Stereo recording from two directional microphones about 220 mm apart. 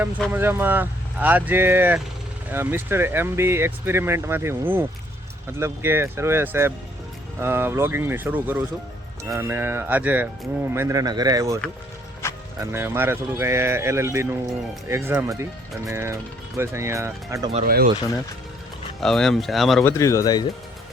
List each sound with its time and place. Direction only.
0.3 s speech: 10° right (ahead or behind)
12.7 s speech: 10° right (ahead or behind)
17.7 s speech: 45° right (ahead or behind)
18.9 s speech: centre (ahead or behind)
19.9 s speech: 15° left (ahead or behind)